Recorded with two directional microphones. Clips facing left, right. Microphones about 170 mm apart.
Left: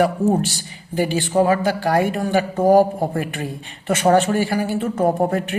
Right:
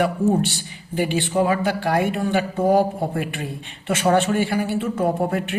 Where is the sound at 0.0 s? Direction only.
40° left (ahead or behind).